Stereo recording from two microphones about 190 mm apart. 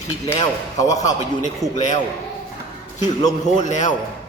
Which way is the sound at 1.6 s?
15° left (ahead or behind).